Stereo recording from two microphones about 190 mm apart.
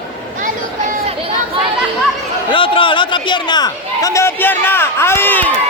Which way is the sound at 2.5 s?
25° left (ahead or behind).